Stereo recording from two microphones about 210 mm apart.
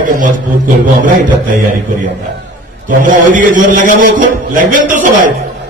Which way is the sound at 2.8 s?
40° right (ahead or behind).